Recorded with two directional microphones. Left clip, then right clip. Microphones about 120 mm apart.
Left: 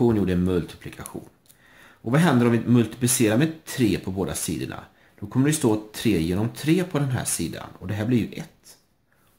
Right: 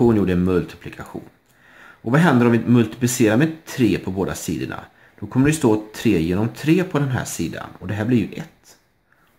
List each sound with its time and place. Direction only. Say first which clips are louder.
0.1 s speech: right 5 dB; 20° right (ahead or behind)